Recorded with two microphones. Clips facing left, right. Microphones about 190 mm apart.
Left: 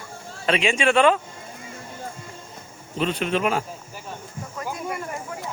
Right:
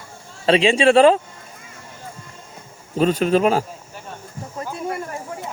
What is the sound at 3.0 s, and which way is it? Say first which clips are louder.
Speech: right 7 dB; 40° right (ahead or behind).